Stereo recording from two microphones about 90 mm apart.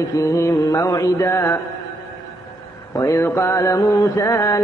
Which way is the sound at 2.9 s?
40° left (ahead or behind).